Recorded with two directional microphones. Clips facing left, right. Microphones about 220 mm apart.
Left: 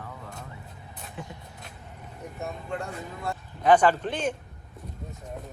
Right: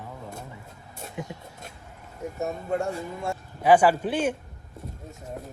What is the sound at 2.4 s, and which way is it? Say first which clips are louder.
Speech: right 6 dB; 45° right (ahead or behind).